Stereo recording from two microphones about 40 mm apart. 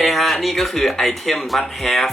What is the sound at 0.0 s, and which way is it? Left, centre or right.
Speech, centre.